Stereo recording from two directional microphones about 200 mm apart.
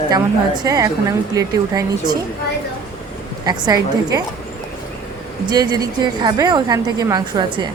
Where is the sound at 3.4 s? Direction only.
20° right (ahead or behind).